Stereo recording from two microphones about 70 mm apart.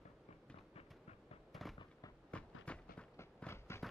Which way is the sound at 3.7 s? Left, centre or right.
Left.